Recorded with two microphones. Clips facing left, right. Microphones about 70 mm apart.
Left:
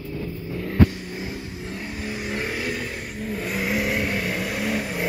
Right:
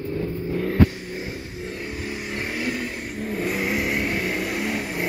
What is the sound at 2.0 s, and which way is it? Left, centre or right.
Vehicle, centre.